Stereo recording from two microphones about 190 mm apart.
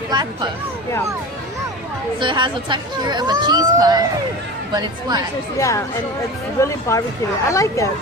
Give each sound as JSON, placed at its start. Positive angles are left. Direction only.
{"t": 0.1, "sound": "speech", "side_deg": -25}
{"t": 2.2, "sound": "speech", "side_deg": -25}
{"t": 5.5, "sound": "speech", "side_deg": 15}